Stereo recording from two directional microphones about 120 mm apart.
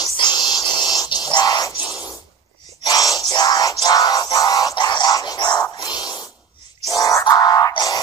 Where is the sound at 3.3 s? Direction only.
35° left (ahead or behind).